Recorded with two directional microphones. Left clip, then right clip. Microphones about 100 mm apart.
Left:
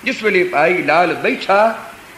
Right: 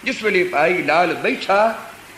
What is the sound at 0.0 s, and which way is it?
A man's voice, 35° left (ahead or behind).